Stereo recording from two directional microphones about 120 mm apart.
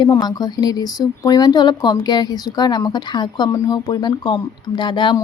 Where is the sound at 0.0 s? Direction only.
35° left (ahead or behind).